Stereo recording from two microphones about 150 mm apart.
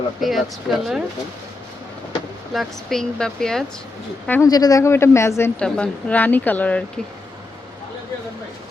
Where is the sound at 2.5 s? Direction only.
Centre (ahead or behind).